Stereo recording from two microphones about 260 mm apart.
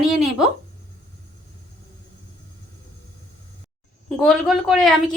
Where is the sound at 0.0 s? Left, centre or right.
Centre.